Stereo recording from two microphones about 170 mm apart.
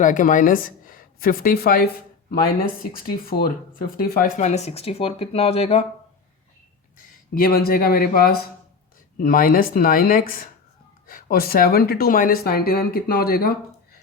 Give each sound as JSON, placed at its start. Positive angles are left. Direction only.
{"t": 0.0, "sound": "a woman's voice", "side_deg": 50}
{"t": 2.9, "sound": "speech", "side_deg": 60}
{"t": 4.4, "sound": "speech", "side_deg": 40}
{"t": 7.3, "sound": "speech", "side_deg": 60}